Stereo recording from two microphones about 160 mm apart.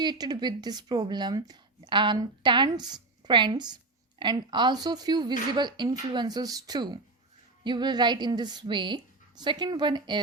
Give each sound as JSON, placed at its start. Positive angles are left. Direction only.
{"t": 0.0, "sound": "a woman's voice", "side_deg": -25}